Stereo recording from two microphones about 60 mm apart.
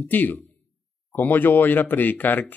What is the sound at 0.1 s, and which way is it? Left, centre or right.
Speech, left.